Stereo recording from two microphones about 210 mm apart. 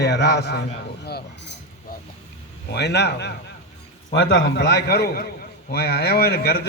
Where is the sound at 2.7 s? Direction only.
55° left (ahead or behind).